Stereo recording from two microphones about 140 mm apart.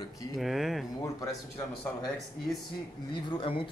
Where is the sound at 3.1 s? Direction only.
35° left (ahead or behind).